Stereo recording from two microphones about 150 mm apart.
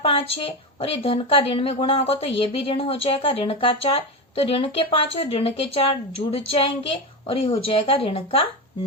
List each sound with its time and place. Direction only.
0.0 s a woman's voice: 35° left (ahead or behind)